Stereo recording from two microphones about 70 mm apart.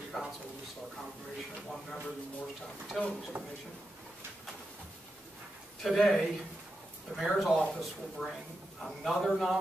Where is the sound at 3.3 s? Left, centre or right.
Right.